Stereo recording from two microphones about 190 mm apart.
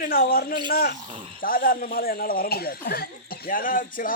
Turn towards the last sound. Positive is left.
turn(degrees=45)  # may be behind; listen again after turning